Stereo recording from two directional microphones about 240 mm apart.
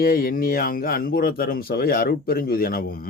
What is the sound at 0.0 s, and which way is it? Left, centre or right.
A man's voice, left.